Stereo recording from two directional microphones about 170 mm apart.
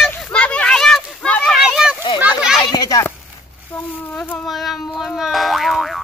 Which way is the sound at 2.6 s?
25° left (ahead or behind).